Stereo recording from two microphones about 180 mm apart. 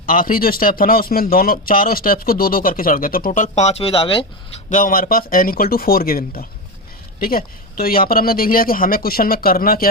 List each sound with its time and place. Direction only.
0.0 s speech: 50° left (ahead or behind); by 4.3 s 30° left (ahead or behind)
4.7 s speech: 50° left (ahead or behind)